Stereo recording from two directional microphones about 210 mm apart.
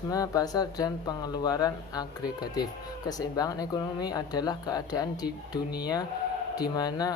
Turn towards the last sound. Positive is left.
turn(degrees=20)  # may be behind; listen again after turning